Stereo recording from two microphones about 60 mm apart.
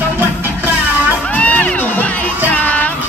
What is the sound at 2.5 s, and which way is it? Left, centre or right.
Music, left.